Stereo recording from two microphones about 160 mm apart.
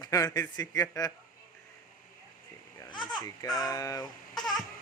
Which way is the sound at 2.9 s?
30° left (ahead or behind).